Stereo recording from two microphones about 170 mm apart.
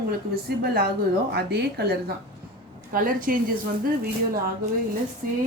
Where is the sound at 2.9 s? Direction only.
55° right (ahead or behind).